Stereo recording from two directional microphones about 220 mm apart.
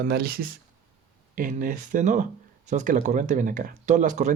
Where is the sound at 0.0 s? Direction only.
45° right (ahead or behind).